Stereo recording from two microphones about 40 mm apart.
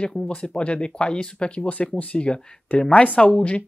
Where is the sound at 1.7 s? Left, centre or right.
Left.